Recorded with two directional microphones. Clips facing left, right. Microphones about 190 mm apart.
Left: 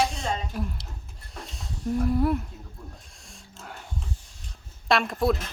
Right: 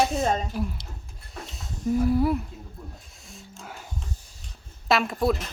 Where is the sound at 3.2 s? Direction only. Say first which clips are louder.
Right 2 dB; centre (ahead or behind).